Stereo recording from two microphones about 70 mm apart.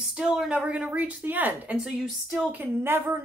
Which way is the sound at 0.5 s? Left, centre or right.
Centre.